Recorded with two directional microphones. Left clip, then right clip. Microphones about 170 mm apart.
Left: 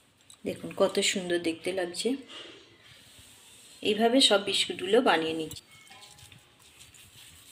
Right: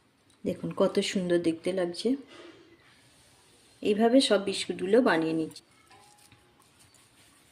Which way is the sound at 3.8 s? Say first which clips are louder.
Even; 40° right (ahead or behind).